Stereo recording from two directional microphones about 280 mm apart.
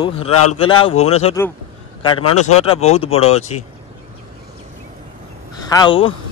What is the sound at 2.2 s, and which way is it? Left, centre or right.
Speech, left.